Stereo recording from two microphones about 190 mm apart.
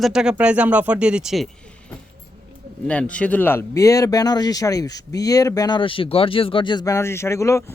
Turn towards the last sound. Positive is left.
turn(degrees=15)  # may be behind; listen again after turning